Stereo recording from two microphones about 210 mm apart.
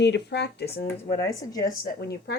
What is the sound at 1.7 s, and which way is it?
Speech, 50° left (ahead or behind).